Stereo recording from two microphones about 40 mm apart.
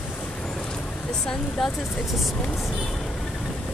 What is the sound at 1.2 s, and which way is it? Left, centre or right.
Speech, centre.